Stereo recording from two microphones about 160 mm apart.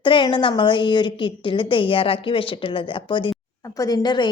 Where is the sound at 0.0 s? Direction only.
30° left (ahead or behind).